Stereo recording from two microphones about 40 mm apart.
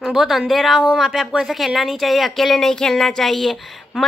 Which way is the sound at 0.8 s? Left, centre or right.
Centre.